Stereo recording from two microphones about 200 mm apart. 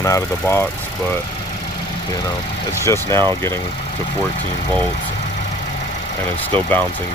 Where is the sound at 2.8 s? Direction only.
15° left (ahead or behind).